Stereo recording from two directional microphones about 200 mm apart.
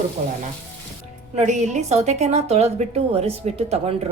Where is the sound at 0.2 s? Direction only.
45° right (ahead or behind).